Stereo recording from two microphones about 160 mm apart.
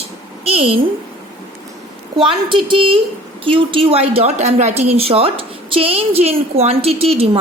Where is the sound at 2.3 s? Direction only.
30° right (ahead or behind).